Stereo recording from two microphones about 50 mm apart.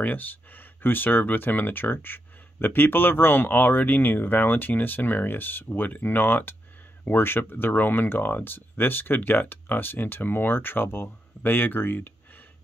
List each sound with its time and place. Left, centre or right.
0.0 s speech: left